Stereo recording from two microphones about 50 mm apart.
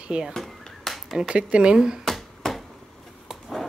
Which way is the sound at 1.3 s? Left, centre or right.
Right.